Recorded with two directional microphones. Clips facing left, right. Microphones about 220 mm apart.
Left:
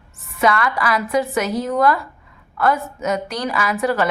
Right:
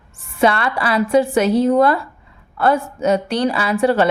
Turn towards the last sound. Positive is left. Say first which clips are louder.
# right 4 dB
turn(degrees=-30)  # may be behind; listen again after turning